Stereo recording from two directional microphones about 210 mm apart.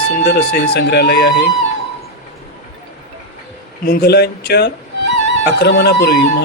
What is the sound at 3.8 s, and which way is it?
Speech, 45° left (ahead or behind).